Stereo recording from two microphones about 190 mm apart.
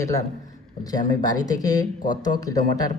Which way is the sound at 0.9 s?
20° left (ahead or behind).